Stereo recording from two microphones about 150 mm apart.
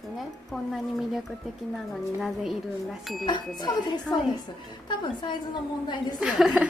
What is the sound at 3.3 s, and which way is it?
A woman's voice, 30° left (ahead or behind).